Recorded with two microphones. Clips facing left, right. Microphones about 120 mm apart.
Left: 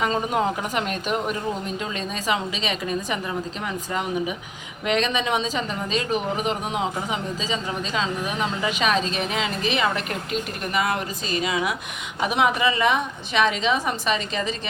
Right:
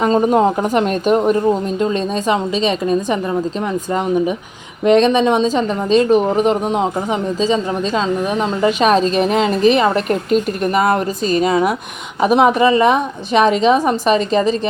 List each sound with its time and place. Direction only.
0.0 s speech: 35° right (ahead or behind)
4.9 s speech: 35° right (ahead or behind)